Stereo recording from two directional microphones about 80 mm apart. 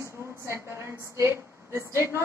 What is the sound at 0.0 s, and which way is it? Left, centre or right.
A woman's voice, right.